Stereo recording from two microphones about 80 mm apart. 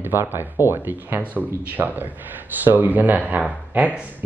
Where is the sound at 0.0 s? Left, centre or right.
Right.